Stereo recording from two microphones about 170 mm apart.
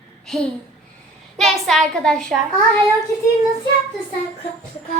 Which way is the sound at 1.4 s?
Centre (ahead or behind).